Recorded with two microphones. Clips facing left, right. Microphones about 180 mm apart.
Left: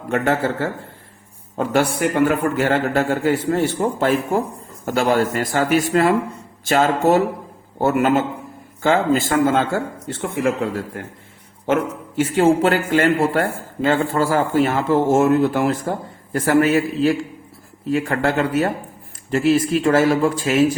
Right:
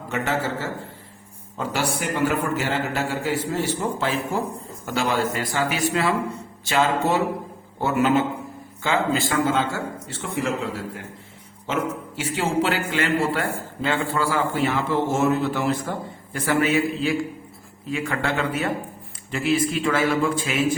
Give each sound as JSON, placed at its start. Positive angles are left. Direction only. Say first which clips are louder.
{"t": 0.1, "sound": "a man's voice", "louder": "left 6 dB", "side_deg": 55}